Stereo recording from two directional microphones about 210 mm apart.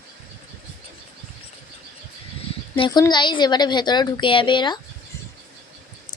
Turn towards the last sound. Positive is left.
turn(degrees=20)  # may be behind; listen again after turning